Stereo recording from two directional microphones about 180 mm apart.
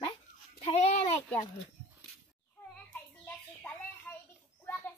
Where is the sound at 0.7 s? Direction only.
40° left (ahead or behind).